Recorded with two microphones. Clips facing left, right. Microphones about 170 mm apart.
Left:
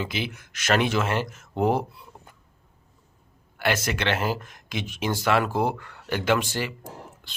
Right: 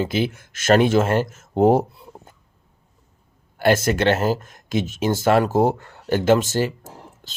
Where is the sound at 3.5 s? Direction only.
45° right (ahead or behind).